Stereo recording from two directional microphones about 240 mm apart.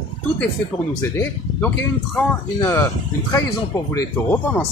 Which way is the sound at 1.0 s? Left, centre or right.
Centre.